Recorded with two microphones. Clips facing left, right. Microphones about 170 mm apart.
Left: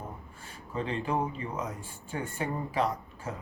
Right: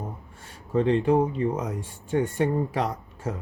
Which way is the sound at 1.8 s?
70° right (ahead or behind).